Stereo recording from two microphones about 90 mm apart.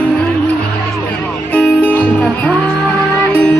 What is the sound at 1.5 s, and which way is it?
Music, 20° left (ahead or behind).